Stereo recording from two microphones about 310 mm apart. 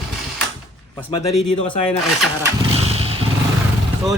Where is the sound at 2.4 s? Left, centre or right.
Centre.